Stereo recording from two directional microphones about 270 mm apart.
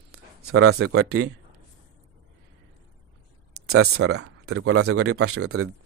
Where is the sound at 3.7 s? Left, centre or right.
Right.